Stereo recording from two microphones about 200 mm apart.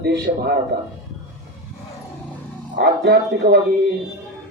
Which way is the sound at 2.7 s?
60° right (ahead or behind).